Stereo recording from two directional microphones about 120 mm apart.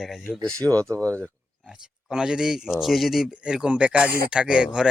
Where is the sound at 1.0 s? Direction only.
10° left (ahead or behind).